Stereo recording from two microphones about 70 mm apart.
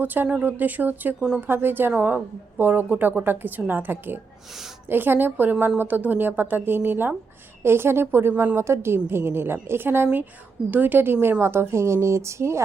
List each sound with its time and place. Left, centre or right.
0.0 s a woman's voice: right